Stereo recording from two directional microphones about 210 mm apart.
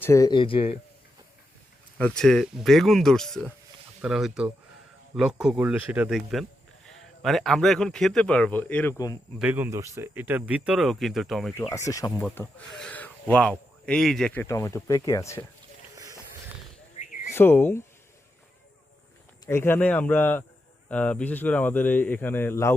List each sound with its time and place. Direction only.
0.0 s speech: 15° left (ahead or behind)
2.0 s speech: 5° left (ahead or behind)
9.4 s speech: 10° right (ahead or behind)
11.5 s speech: 15° left (ahead or behind)
14.4 s speech: 15° left (ahead or behind)
17.0 s a sound: 35° left (ahead or behind)
17.3 s speech: 10° left (ahead or behind)
19.5 s speech: 10° left (ahead or behind)